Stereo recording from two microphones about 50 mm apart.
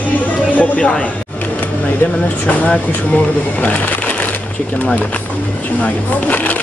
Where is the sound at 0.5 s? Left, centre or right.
Left.